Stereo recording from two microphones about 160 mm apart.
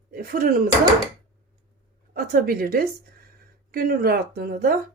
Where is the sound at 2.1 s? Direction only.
65° right (ahead or behind).